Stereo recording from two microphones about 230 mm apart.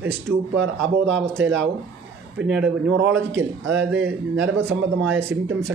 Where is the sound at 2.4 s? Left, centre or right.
Centre.